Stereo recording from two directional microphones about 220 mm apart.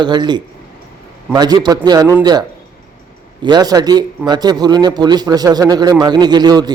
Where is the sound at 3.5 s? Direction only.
20° right (ahead or behind).